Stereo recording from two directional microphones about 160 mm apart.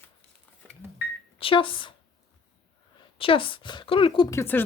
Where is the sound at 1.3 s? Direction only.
35° left (ahead or behind).